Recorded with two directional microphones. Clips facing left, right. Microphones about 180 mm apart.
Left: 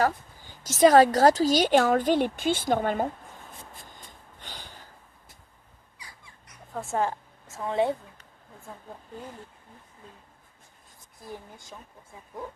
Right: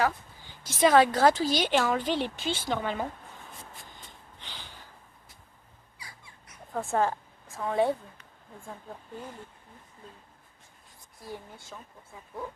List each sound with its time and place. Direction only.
0.0 s a woman's voice: 45° left (ahead or behind)
3.8 s a sound: 45° left (ahead or behind)
6.9 s a woman's voice: 15° left (ahead or behind)
11.2 s speech: 20° left (ahead or behind)